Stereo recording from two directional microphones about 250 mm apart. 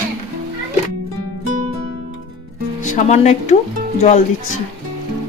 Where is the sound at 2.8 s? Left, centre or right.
Left.